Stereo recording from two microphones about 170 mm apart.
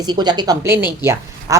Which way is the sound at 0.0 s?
25° right (ahead or behind).